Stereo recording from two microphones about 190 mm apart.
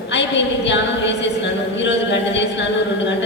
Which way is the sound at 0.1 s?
70° left (ahead or behind).